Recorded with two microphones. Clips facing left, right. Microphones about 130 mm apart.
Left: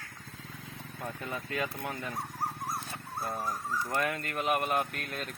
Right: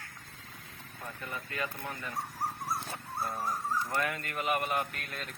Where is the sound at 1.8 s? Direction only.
20° left (ahead or behind).